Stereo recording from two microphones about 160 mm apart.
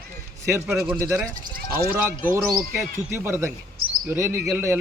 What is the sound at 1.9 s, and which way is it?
A man's voice, 10° right (ahead or behind).